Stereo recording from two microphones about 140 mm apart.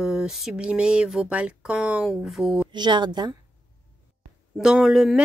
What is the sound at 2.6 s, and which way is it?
Speech, 30° right (ahead or behind).